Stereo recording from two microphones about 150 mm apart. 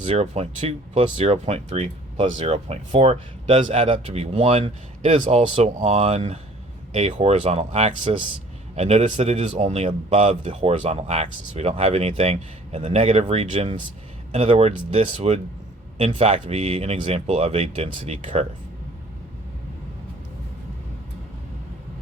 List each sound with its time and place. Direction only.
0.0 s speech: 40° right (ahead or behind)